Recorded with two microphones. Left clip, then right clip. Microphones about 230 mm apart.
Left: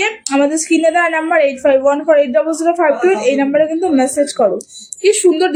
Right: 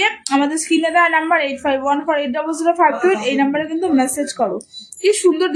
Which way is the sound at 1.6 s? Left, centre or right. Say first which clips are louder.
Left 6 dB; centre.